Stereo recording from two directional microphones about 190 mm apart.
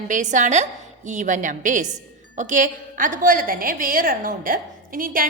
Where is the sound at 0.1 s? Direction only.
40° right (ahead or behind).